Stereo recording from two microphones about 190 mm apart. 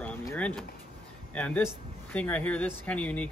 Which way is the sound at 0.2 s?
10° left (ahead or behind).